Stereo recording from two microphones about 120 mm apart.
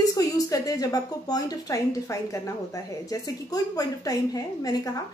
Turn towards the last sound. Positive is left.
turn(degrees=30)  # may be behind; listen again after turning